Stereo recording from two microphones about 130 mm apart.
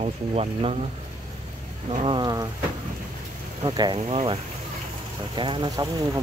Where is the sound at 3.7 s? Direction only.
30° right (ahead or behind).